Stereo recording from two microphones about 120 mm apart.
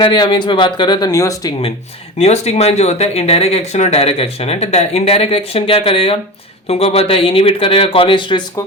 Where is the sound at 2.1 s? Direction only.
60° left (ahead or behind); by 8.4 s 40° left (ahead or behind).